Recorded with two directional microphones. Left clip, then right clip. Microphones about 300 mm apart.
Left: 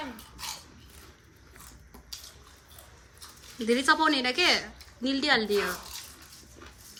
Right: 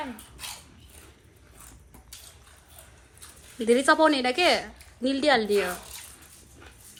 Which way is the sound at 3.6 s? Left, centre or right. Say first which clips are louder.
Right 4 dB; centre.